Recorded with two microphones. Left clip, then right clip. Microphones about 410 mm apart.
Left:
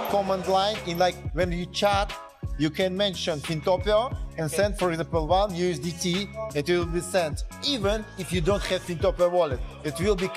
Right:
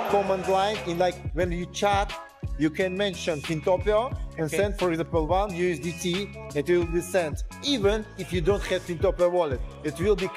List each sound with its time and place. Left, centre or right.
0.3 s speech: left
6.5 s speech: left